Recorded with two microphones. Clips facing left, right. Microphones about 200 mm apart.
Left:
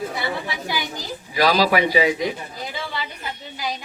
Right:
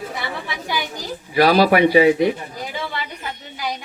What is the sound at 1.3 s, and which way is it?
Speech, 55° right (ahead or behind).